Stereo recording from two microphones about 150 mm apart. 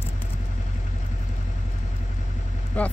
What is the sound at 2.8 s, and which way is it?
Speech, 10° left (ahead or behind).